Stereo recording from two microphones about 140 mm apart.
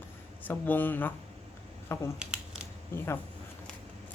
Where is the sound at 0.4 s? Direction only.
15° left (ahead or behind).